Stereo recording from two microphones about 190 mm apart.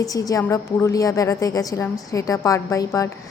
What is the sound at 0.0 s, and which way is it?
A woman's voice, 20° left (ahead or behind).